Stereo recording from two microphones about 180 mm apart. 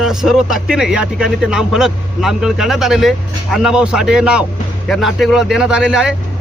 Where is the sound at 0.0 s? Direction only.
Centre (ahead or behind).